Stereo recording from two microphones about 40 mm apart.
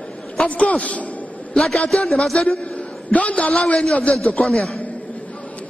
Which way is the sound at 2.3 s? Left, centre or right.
Left.